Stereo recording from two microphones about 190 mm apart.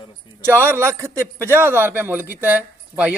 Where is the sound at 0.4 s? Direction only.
10° right (ahead or behind).